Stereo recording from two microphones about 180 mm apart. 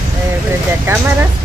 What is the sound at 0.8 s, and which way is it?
Speech, 15° right (ahead or behind).